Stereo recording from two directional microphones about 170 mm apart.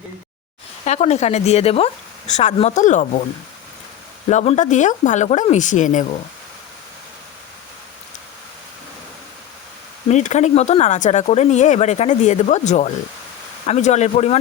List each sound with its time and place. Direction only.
0.9 s speech: 40° left (ahead or behind)
4.3 s speech: 45° left (ahead or behind)
10.1 s speech: 45° left (ahead or behind)